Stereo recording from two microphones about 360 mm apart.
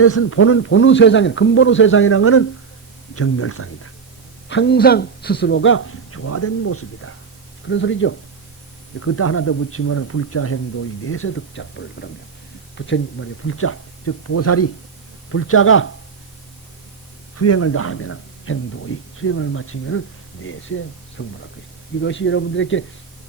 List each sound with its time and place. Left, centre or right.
0.0 s a man's voice: left
17.3 s a man's voice: left